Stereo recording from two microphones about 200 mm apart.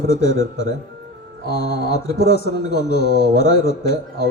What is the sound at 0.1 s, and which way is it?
A man's voice, 55° left (ahead or behind).